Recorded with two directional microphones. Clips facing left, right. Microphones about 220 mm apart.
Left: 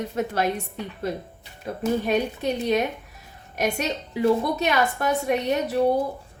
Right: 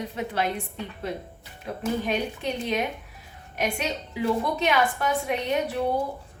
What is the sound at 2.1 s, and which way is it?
A woman's voice, 40° left (ahead or behind).